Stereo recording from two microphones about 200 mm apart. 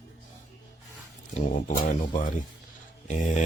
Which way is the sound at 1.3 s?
40° left (ahead or behind).